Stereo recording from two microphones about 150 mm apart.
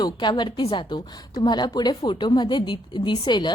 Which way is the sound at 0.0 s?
30° left (ahead or behind).